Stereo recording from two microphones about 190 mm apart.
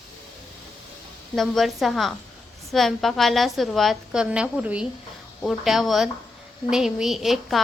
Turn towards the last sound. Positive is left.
turn(degrees=0)  # may be behind; listen again after turning